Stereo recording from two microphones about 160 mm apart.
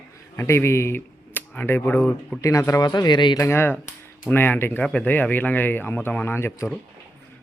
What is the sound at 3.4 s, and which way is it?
Speech, 15° left (ahead or behind).